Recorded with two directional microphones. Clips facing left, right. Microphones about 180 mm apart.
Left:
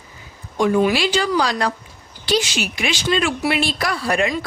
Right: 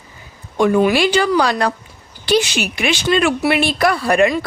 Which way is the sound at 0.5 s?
60° right (ahead or behind).